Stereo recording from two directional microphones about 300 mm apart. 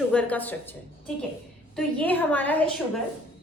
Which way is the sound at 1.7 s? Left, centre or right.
Centre.